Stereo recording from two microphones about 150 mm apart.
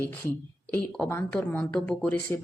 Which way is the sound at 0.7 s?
10° left (ahead or behind).